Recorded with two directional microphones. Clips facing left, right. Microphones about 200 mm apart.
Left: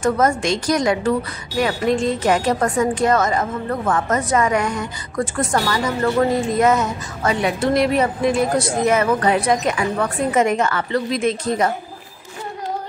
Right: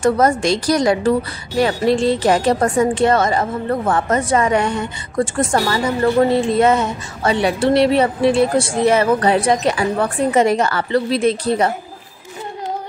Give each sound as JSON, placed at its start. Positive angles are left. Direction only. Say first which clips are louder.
{"t": 0.0, "sound": "speech", "louder": "right 3 dB", "side_deg": -35}